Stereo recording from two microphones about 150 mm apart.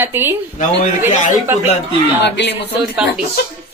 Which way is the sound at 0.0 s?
15° right (ahead or behind).